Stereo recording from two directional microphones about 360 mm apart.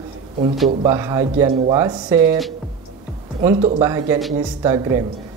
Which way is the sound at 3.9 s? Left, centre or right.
Centre.